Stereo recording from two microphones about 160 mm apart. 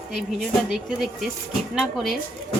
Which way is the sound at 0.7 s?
Centre (ahead or behind).